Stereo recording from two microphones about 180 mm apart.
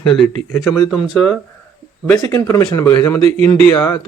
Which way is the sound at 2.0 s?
15° left (ahead or behind).